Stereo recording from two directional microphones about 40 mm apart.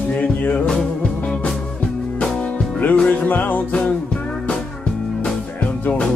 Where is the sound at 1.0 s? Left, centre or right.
Left.